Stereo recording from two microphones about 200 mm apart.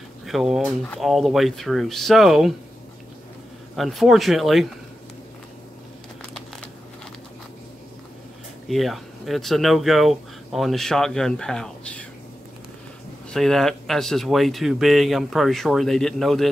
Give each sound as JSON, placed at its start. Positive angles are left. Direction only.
{"t": 0.3, "sound": "speech", "side_deg": 0}
{"t": 3.7, "sound": "speech", "side_deg": 0}
{"t": 8.6, "sound": "speech", "side_deg": 0}
{"t": 13.3, "sound": "speech", "side_deg": 0}